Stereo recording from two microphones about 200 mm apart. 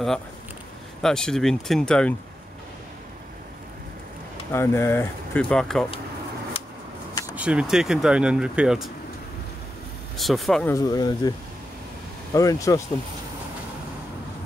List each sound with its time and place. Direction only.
1.0 s speech: 5° left (ahead or behind)
4.5 s speech: 10° left (ahead or behind)
7.3 s speech: 5° right (ahead or behind)
10.1 s speech: centre (ahead or behind)
10.7 s speech: 20° left (ahead or behind)
12.4 s speech: 15° left (ahead or behind)